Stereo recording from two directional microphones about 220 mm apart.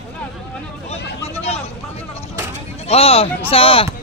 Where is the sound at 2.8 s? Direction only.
25° left (ahead or behind).